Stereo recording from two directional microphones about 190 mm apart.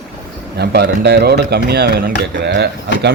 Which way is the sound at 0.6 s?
55° right (ahead or behind).